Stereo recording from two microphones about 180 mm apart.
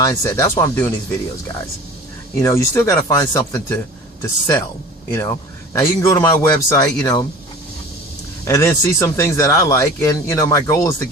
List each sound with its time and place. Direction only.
0.0 s speech: 15° left (ahead or behind)
2.4 s speech: 15° left (ahead or behind)
5.7 s speech: 15° left (ahead or behind)
8.4 s speech: 15° left (ahead or behind)